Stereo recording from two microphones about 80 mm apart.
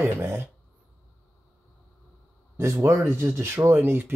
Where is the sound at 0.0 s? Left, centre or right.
Right.